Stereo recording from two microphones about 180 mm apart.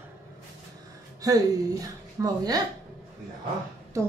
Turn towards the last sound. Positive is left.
turn(degrees=-15)  # may be behind; listen again after turning